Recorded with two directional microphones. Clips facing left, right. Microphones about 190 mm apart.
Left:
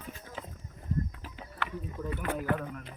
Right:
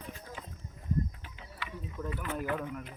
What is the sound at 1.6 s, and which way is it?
Mechanisms, 60° left (ahead or behind).